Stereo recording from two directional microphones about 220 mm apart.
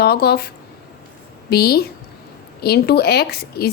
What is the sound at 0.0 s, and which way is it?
A woman's voice, 45° left (ahead or behind).